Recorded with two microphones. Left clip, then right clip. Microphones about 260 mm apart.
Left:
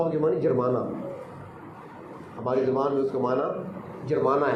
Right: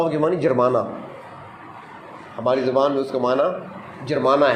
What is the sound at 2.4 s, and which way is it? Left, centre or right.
A man's voice, right.